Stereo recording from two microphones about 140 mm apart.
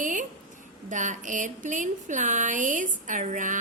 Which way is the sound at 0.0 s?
70° right (ahead or behind).